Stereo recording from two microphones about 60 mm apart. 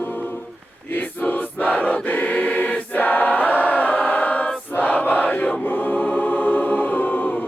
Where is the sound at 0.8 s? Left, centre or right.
Left.